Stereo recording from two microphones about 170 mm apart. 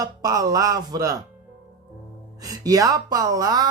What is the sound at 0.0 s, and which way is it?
Speech, 20° right (ahead or behind).